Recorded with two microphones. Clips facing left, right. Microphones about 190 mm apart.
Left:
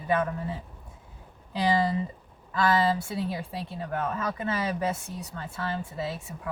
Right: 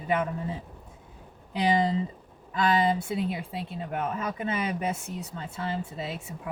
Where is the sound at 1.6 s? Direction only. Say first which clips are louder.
Right 1 dB; 20° right (ahead or behind).